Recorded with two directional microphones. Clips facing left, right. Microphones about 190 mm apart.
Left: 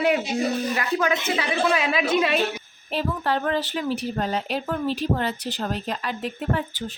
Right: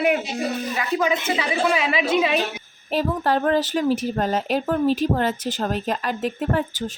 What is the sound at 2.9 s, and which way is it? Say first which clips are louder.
A woman's voice: right 4 dB; 40° right (ahead or behind).